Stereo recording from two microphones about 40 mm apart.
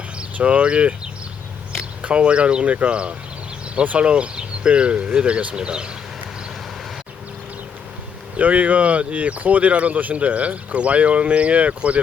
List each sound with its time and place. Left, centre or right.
0.3 s speech: right
2.0 s speech: right
8.4 s speech: right